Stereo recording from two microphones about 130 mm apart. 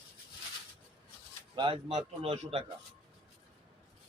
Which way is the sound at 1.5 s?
40° right (ahead or behind).